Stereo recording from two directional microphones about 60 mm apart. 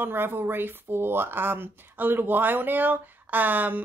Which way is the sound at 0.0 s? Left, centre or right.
Right.